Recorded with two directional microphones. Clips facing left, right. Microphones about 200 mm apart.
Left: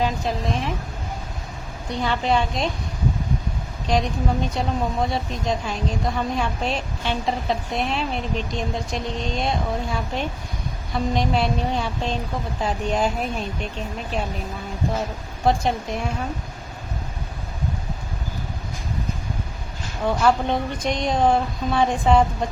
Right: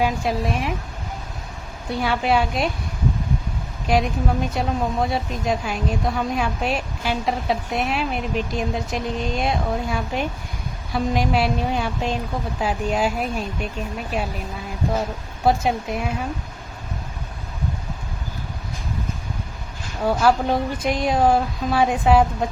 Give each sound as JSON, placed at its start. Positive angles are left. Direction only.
{"t": 0.0, "sound": "a woman's voice", "side_deg": -10}
{"t": 1.9, "sound": "a woman's voice", "side_deg": -10}
{"t": 3.8, "sound": "a woman's voice", "side_deg": -5}
{"t": 15.4, "sound": "a woman's voice", "side_deg": -5}
{"t": 20.1, "sound": "a woman's voice", "side_deg": -5}